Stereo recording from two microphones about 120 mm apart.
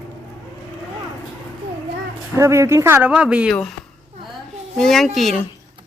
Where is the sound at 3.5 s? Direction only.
5° left (ahead or behind).